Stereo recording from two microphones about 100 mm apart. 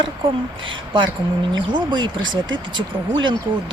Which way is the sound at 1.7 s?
45° right (ahead or behind).